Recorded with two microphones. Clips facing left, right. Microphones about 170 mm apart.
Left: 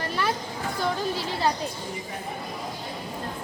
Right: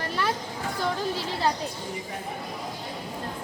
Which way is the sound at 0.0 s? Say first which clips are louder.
Left 1 dB; 15° left (ahead or behind).